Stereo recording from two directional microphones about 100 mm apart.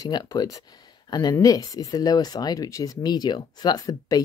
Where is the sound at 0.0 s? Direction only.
40° left (ahead or behind).